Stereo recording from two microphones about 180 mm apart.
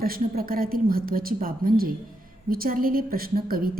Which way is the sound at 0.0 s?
55° right (ahead or behind).